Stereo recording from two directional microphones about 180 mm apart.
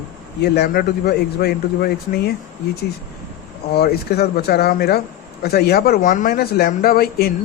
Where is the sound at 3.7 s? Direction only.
60° left (ahead or behind).